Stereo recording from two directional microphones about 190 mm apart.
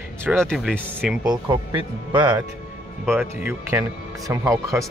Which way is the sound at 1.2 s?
20° right (ahead or behind).